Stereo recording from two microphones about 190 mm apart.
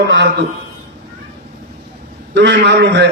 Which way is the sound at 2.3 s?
65° right (ahead or behind).